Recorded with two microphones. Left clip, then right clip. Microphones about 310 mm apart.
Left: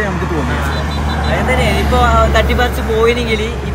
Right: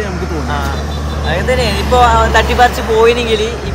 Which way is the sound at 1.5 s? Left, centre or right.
Centre.